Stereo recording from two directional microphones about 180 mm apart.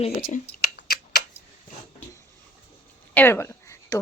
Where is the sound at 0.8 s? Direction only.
75° left (ahead or behind).